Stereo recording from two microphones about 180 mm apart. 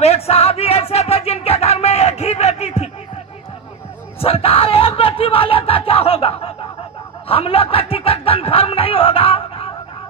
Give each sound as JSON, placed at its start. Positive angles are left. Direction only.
{"t": 0.0, "sound": "music", "side_deg": 35}
{"t": 4.2, "sound": "a sound", "side_deg": 30}
{"t": 7.2, "sound": "speech", "side_deg": 30}